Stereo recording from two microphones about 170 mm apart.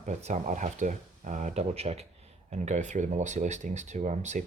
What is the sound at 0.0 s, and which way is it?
Speech, 45° right (ahead or behind).